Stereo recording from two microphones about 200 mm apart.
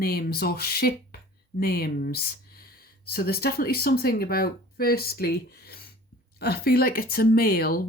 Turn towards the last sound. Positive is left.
turn(degrees=50)  # may be behind; listen again after turning